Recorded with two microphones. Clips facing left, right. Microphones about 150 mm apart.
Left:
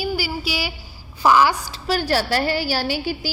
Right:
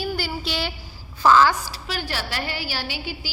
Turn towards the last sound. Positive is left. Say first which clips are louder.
# left 8 dB
turn(degrees=40)  # may be behind; listen again after turning